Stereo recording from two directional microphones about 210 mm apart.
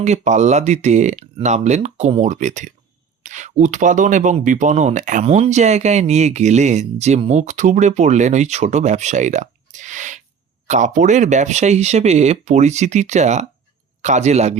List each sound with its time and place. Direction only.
0.0 s speech: 35° right (ahead or behind)